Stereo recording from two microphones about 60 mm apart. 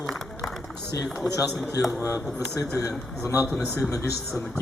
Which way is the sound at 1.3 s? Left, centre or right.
Left.